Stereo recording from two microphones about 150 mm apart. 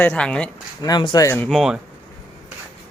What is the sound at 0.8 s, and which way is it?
Speech, 30° left (ahead or behind).